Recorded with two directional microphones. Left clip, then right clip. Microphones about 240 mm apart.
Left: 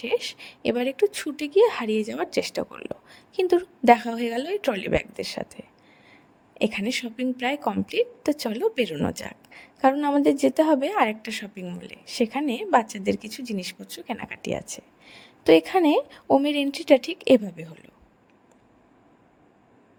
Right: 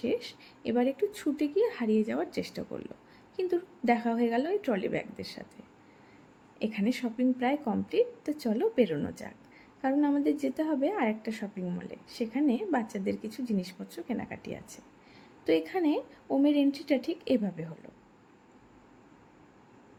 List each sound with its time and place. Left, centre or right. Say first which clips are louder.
0.0 s a woman's voice: left 6 dB; left
6.6 s a woman's voice: left 7 dB; left